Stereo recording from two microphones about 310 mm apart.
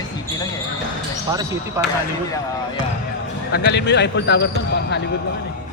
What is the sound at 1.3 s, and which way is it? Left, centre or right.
Speech, centre.